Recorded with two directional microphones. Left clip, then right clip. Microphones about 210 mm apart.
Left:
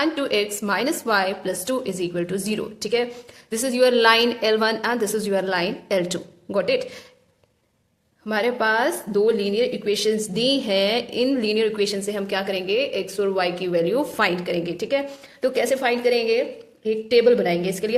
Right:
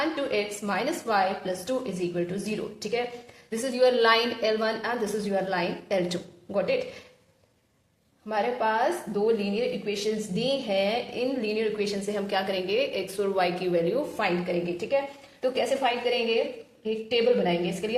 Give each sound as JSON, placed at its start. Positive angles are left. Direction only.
{"t": 0.0, "sound": "a woman's voice", "side_deg": 40}
{"t": 8.3, "sound": "a woman's voice", "side_deg": 45}